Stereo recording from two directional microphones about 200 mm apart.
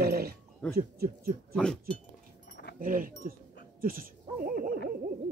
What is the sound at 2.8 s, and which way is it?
Speech, 45° right (ahead or behind).